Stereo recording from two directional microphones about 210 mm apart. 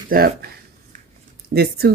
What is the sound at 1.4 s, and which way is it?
Speech, 50° right (ahead or behind).